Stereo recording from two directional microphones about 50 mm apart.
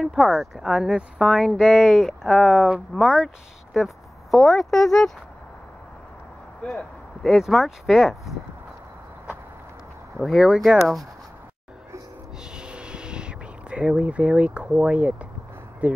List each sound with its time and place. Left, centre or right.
0.0 s speech: centre
2.0 s speech: centre
3.7 s speech: centre
6.6 s speech: left
7.2 s speech: centre
10.1 s speech: centre
12.5 s a sound: centre
15.8 s speech: right